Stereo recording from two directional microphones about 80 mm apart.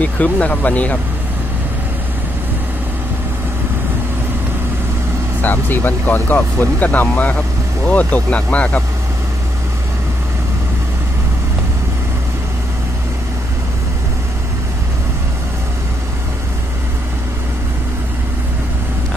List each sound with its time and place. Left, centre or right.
0.0 s speech: centre
5.4 s speech: left